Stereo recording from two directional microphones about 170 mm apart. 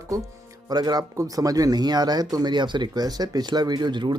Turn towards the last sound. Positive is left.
turn(degrees=-25)  # may be behind; listen again after turning